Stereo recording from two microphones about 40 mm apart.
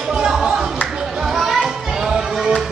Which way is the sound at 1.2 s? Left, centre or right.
Centre.